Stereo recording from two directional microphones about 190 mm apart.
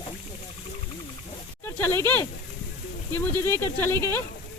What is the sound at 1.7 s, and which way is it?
Speech, 10° left (ahead or behind).